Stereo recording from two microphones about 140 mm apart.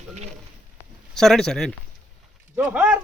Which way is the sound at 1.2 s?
5° left (ahead or behind).